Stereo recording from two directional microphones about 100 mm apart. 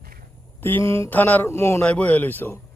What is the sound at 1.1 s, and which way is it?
Speech, 15° left (ahead or behind).